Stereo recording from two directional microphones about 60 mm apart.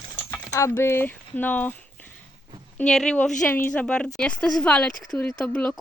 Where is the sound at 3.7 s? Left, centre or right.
Centre.